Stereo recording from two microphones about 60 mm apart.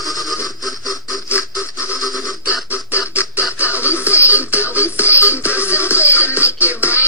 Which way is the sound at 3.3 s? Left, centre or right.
Right.